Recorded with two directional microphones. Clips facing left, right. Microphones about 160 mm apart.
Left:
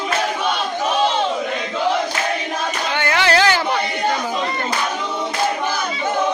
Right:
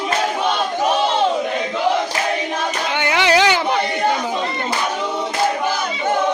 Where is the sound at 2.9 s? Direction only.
15° right (ahead or behind).